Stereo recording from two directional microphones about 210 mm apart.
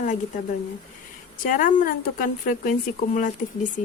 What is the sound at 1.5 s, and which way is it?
Speech, 40° left (ahead or behind).